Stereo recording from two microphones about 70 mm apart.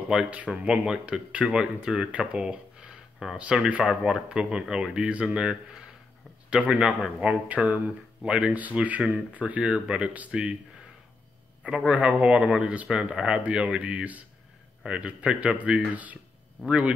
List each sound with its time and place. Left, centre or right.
0.1 s speech: centre
11.9 s speech: centre